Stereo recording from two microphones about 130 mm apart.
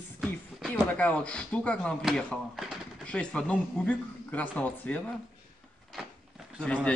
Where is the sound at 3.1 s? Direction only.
10° left (ahead or behind).